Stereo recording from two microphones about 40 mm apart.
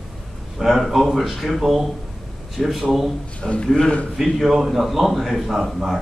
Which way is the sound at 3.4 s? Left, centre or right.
Left.